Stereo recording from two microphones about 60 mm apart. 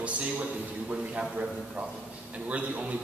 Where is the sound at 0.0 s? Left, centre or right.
Right.